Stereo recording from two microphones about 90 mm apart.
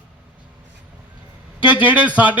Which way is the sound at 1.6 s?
15° right (ahead or behind).